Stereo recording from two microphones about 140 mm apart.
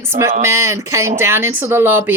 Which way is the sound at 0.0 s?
20° right (ahead or behind).